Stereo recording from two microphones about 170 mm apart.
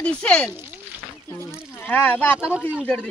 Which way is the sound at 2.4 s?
5° right (ahead or behind).